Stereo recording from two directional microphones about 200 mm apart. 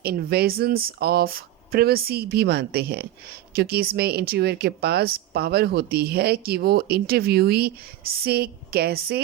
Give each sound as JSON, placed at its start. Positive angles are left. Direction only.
{"t": 0.0, "sound": "speech", "side_deg": -50}